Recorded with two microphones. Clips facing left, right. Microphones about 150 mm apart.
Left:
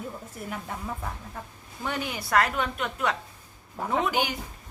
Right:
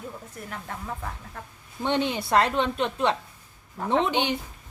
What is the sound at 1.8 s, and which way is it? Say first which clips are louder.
A woman's voice: right 6 dB; 25° right (ahead or behind).